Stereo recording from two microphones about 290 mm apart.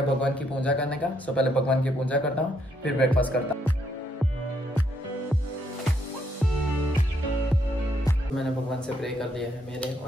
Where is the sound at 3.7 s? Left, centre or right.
Left.